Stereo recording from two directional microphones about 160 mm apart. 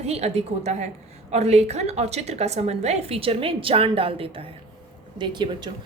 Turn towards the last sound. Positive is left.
turn(degrees=-30)  # may be behind; listen again after turning